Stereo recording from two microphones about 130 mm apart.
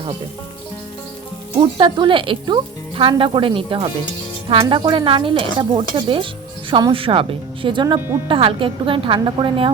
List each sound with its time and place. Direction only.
1.8 s speech: 40° right (ahead or behind)